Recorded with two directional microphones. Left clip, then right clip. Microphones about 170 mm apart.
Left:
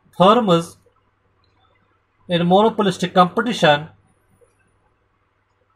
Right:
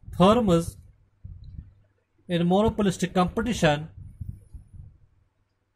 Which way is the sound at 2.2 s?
30° right (ahead or behind).